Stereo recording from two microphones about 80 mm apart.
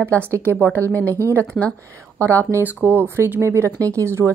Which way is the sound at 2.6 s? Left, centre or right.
Right.